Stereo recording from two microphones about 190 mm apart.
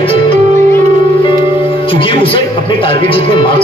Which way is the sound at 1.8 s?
25° left (ahead or behind).